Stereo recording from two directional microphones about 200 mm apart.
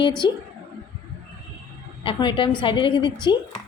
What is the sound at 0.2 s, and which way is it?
Speech, 10° right (ahead or behind).